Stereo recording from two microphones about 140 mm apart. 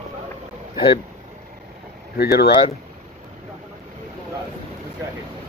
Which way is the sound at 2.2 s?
90° left.